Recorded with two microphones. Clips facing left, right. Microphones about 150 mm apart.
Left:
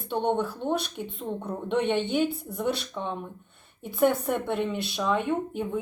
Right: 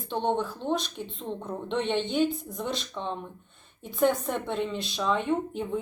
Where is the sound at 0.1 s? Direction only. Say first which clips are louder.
Left 2 dB; 10° left (ahead or behind).